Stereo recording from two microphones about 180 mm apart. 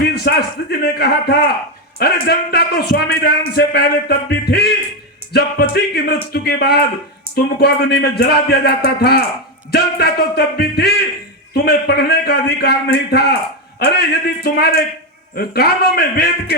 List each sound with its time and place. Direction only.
0.0 s a man's voice: 60° left (ahead or behind)
14.4 s a man's voice: 60° left (ahead or behind)